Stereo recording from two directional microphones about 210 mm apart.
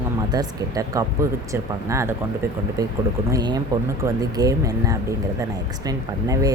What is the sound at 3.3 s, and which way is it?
Speech, 20° right (ahead or behind).